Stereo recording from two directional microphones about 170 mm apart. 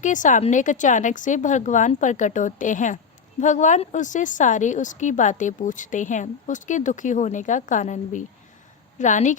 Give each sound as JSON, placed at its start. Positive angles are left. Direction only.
{"t": 0.0, "sound": "speech", "side_deg": 50}